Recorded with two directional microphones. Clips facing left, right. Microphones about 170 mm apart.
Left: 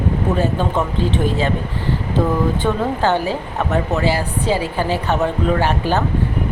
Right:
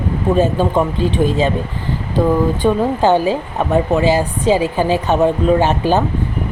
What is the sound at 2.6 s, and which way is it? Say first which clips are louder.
Speech: right 4 dB; 15° right (ahead or behind).